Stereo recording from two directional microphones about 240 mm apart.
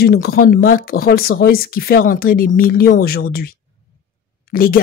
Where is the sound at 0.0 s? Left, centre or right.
Left.